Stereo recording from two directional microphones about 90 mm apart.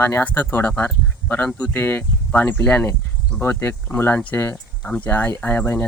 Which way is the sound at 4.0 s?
20° left (ahead or behind).